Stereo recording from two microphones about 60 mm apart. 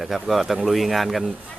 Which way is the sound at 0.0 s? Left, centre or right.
Centre.